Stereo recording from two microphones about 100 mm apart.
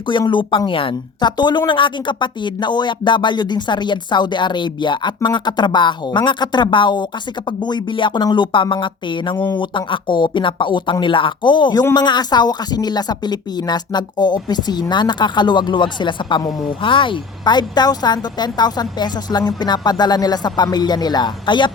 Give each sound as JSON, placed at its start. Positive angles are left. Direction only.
{"t": 0.0, "sound": "speech", "side_deg": 55}
{"t": 16.5, "sound": "speech", "side_deg": 0}
{"t": 16.8, "sound": "speech", "side_deg": 55}